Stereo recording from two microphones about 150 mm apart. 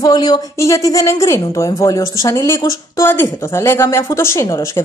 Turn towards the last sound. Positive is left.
turn(degrees=20)  # may be behind; listen again after turning